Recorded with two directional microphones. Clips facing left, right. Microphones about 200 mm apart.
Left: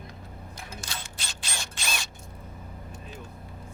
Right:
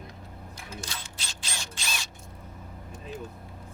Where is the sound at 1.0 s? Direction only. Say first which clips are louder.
Left 1 dB; 55° left (ahead or behind).